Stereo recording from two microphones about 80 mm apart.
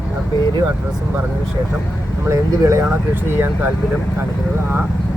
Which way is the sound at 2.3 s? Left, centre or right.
Right.